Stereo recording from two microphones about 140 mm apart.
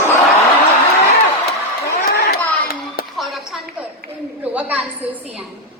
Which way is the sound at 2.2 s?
90° left.